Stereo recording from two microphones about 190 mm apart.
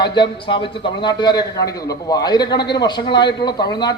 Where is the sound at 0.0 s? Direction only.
25° left (ahead or behind).